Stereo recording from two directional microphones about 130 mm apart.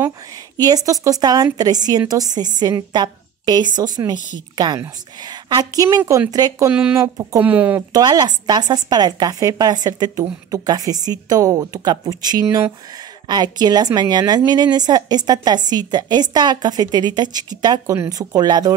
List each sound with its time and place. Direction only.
0.6 s a woman's voice: 30° right (ahead or behind)
6.7 s speech: 10° right (ahead or behind)
7.9 s a woman's voice: 35° right (ahead or behind)